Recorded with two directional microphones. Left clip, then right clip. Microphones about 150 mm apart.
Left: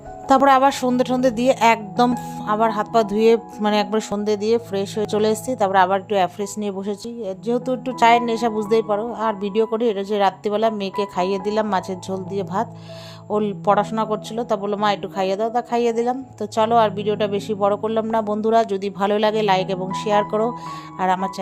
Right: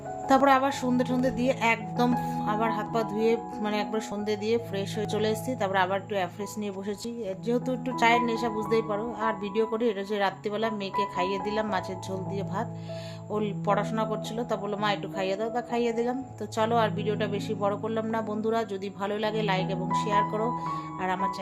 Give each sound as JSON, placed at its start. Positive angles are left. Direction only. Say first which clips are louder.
{"t": 0.4, "sound": "speech", "louder": "left 8 dB", "side_deg": 65}
{"t": 2.4, "sound": "speech", "louder": "left 12 dB", "side_deg": 50}
{"t": 7.2, "sound": "speech", "louder": "left 6 dB", "side_deg": 35}
{"t": 8.9, "sound": "speech", "louder": "left 7 dB", "side_deg": 35}